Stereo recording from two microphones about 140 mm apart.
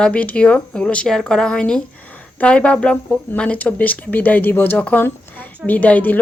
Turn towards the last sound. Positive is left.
turn(degrees=10)  # may be behind; listen again after turning